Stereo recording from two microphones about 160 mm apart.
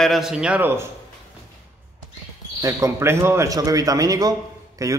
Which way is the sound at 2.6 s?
20° right (ahead or behind).